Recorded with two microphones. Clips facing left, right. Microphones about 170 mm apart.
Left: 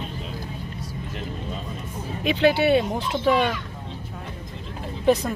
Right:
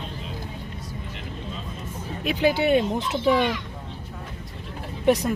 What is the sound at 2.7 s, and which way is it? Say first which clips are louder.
Speech: even; 15° right (ahead or behind).